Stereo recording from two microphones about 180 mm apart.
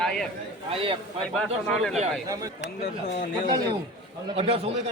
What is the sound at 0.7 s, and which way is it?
Speech, 30° right (ahead or behind).